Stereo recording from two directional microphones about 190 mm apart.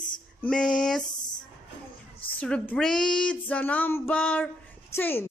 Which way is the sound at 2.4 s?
5° left (ahead or behind).